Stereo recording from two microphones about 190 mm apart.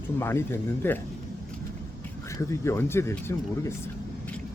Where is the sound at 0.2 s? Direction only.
15° left (ahead or behind).